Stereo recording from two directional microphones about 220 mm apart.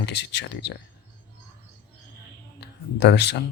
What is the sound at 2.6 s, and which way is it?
Speech, 50° left (ahead or behind).